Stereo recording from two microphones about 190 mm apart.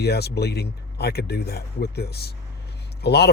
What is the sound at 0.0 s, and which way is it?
Speech, 60° left (ahead or behind).